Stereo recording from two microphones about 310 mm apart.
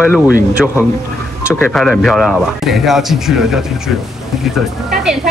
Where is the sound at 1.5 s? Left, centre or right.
Centre.